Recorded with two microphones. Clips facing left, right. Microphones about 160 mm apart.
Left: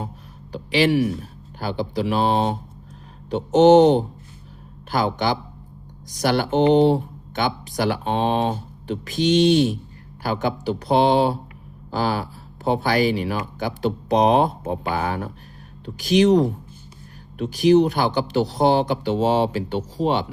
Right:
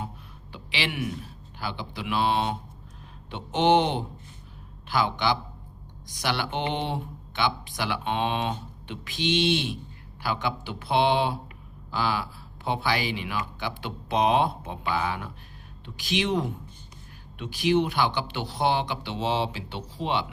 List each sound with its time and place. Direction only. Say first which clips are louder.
0.5 s speech: left 14 dB; 40° left (ahead or behind)